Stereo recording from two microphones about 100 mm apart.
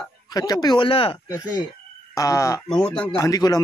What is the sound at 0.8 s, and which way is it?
Speech, 65° left (ahead or behind).